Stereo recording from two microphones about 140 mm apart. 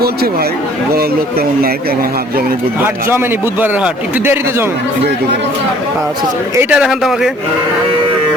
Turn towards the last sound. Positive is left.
turn(degrees=-5)  # may be behind; listen again after turning